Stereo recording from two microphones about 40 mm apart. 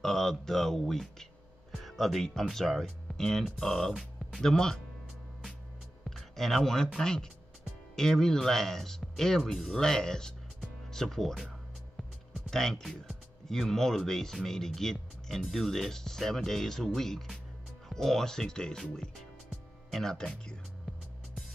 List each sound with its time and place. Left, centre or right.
0.0 s speech: centre
3.9 s music: centre
4.4 s speech: centre
6.0 s music: centre
7.0 s speech: centre
12.4 s speech: centre
19.9 s speech: centre